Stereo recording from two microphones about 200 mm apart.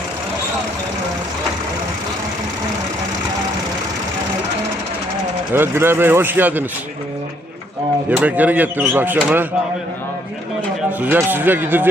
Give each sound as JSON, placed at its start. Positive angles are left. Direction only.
{"t": 5.5, "sound": "speech", "side_deg": -10}
{"t": 8.1, "sound": "speech", "side_deg": -10}
{"t": 11.0, "sound": "speech", "side_deg": -10}